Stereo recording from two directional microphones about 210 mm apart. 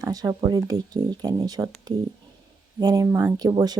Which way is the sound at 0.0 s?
15° right (ahead or behind).